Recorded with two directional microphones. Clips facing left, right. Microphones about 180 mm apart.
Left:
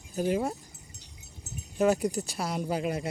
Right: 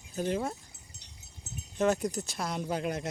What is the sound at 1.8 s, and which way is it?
Speech, 10° left (ahead or behind).